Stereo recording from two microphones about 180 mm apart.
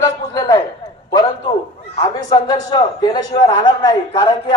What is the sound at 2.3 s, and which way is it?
A man's voice, 20° left (ahead or behind).